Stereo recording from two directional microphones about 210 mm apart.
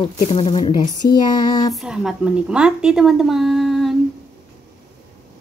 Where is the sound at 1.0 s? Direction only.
45° left (ahead or behind).